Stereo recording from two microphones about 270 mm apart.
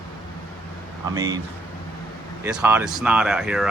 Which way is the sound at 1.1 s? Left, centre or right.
Centre.